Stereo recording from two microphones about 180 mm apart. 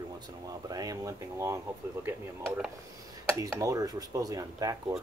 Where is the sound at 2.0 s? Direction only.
5° right (ahead or behind).